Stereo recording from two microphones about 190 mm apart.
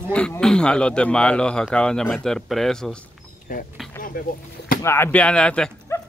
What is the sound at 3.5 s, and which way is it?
Speech, 45° left (ahead or behind).